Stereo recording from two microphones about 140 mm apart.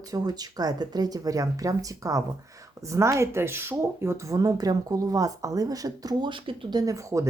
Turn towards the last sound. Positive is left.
turn(degrees=-20)  # may be behind; listen again after turning